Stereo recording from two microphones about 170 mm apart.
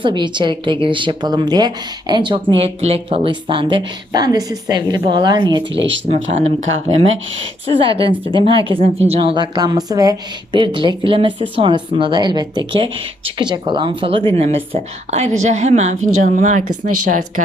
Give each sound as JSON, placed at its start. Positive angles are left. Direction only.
{"t": 0.0, "sound": "speech", "side_deg": -30}
{"t": 7.8, "sound": "a woman's voice", "side_deg": -30}